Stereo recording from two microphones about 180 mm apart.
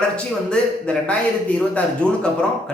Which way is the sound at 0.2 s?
5° left (ahead or behind).